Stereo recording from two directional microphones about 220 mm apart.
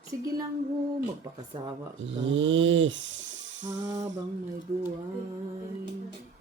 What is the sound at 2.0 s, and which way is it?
Music, 55° right (ahead or behind).